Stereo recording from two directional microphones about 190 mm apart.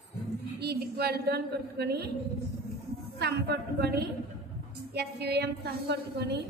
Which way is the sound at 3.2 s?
60° right (ahead or behind).